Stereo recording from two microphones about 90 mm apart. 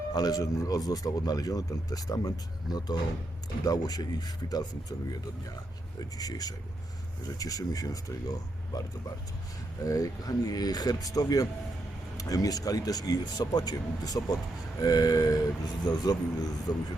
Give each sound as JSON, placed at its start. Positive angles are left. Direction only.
{"t": 0.1, "sound": "speech", "side_deg": 45}
{"t": 6.0, "sound": "speech", "side_deg": 45}